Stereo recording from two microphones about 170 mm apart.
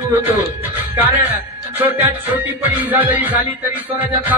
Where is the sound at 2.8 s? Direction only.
10° right (ahead or behind).